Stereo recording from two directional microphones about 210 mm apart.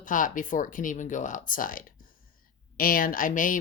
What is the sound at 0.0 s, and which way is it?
Speech, 40° left (ahead or behind).